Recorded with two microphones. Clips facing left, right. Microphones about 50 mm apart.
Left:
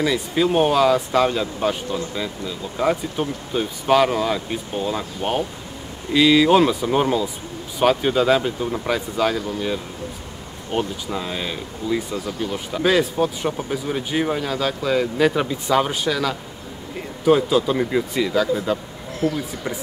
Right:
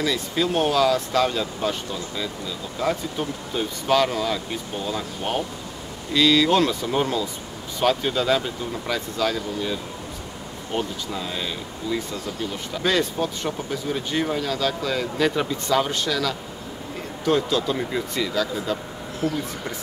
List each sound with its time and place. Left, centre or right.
0.0 s speech: centre